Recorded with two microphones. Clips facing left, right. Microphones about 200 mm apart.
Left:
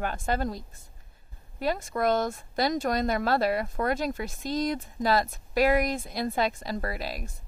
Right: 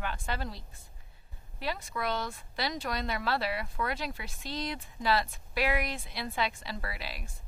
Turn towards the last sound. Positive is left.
turn(degrees=45)  # may be behind; listen again after turning